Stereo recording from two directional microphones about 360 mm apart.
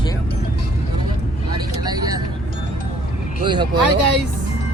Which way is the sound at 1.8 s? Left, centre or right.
Centre.